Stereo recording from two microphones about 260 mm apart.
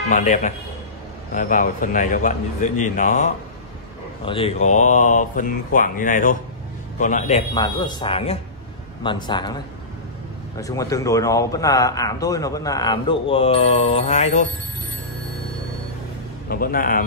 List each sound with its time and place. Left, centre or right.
0.1 s speech: left
4.3 s a man's voice: left
10.6 s a man's voice: centre
16.4 s a man's voice: left